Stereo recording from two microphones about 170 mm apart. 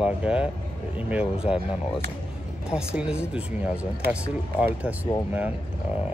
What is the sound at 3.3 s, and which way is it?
Speech, 5° right (ahead or behind).